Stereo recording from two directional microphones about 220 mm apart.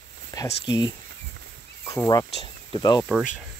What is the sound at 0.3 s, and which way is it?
Speech, 15° left (ahead or behind).